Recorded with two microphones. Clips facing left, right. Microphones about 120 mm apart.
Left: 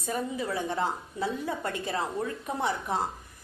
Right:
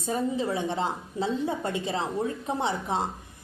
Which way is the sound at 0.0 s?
25° right (ahead or behind).